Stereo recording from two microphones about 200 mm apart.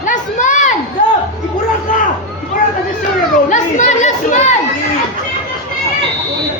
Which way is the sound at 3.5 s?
35° left (ahead or behind).